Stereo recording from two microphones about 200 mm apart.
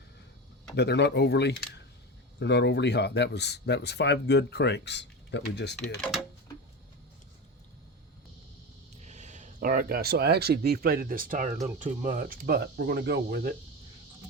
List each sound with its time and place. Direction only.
0.8 s speech: 60° left (ahead or behind)
6.0 s speech: centre (ahead or behind)
9.0 s speech: 35° right (ahead or behind); by 13.5 s 55° right (ahead or behind)